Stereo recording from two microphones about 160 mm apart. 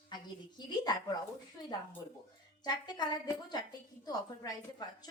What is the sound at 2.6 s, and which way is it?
A woman's voice, 25° left (ahead or behind).